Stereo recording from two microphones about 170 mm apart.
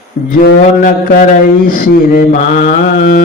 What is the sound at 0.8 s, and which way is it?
Mantra, 50° left (ahead or behind).